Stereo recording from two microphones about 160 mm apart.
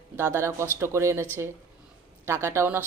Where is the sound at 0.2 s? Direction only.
15° right (ahead or behind).